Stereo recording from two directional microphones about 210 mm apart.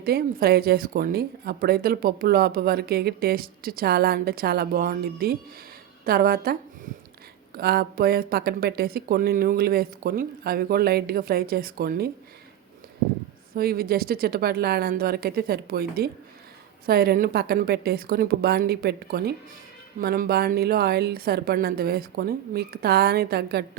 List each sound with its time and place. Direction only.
0.0 s speech: 45° right (ahead or behind)
13.5 s speech: 45° right (ahead or behind)